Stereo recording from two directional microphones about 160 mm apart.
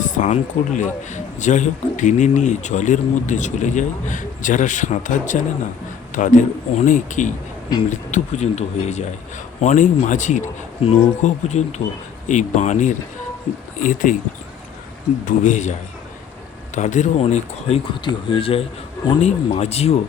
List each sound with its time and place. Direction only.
0.0 s a man's voice: 50° left (ahead or behind)
15.2 s a man's voice: 55° left (ahead or behind)
16.7 s a man's voice: 50° left (ahead or behind)
18.0 s speech: 30° left (ahead or behind)